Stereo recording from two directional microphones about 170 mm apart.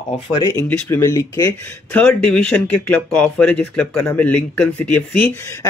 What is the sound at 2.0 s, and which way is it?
Speech, 5° left (ahead or behind).